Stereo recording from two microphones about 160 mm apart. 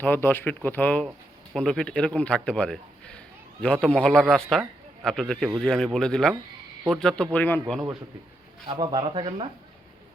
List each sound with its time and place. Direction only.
0.0 s speech: 15° left (ahead or behind)
8.6 s speech: 35° right (ahead or behind)